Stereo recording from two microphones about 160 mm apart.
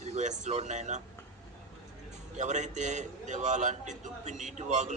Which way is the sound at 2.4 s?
45° right (ahead or behind).